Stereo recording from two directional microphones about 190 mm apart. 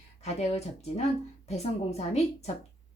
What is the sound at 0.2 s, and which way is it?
A woman's voice, 35° left (ahead or behind).